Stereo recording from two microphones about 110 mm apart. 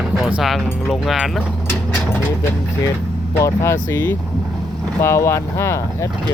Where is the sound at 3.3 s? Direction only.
25° left (ahead or behind).